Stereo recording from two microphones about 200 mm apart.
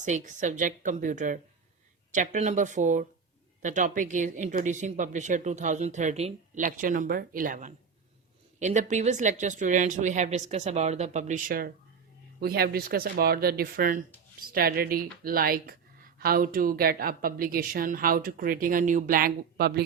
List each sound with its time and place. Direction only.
0.0 s speech: 40° right (ahead or behind)